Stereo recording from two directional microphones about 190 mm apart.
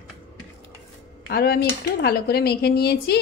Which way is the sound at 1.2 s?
55° left (ahead or behind).